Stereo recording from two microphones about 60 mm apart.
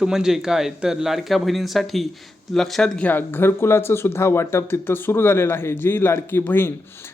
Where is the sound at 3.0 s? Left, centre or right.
Left.